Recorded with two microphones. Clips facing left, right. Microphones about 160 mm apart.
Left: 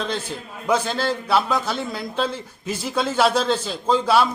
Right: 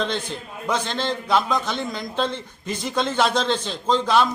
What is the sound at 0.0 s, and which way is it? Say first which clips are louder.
A man's voice: right 1 dB; 5° left (ahead or behind).